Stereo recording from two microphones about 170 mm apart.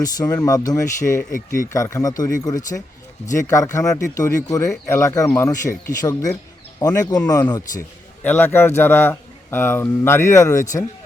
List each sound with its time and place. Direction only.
0.0 s a man's voice: 20° left (ahead or behind)
8.2 s a man's voice: 10° left (ahead or behind)